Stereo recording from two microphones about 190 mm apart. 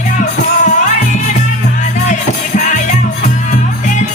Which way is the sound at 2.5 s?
40° left (ahead or behind).